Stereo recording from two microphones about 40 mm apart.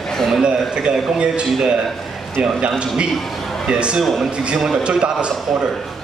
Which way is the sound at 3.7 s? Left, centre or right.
Right.